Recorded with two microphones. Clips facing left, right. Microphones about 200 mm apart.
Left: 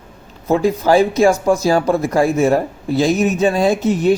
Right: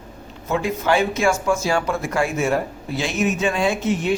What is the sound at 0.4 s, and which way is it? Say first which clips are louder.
Speech: left 7 dB; 35° left (ahead or behind).